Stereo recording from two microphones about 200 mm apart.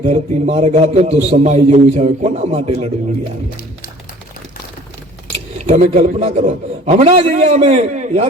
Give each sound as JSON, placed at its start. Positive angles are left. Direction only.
{"t": 0.0, "sound": "a man's voice", "side_deg": -30}
{"t": 5.5, "sound": "a man's voice", "side_deg": -35}